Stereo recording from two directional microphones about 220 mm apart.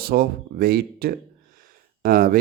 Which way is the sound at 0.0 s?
45° right (ahead or behind).